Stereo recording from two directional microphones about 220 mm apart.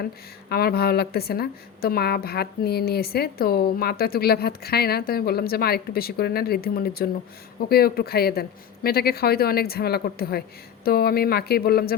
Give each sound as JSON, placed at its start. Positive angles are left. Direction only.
{"t": 0.0, "sound": "a woman's voice", "side_deg": 45}